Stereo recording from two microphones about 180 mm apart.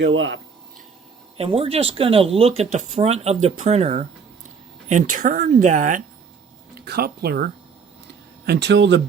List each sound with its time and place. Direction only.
0.0 s speech: 90° right
1.4 s a woman's voice: 30° right (ahead or behind)
6.7 s speech: 60° right (ahead or behind); by 9.0 s 75° right (ahead or behind)